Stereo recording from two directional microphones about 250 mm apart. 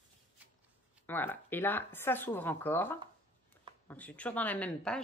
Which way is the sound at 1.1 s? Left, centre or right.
Centre.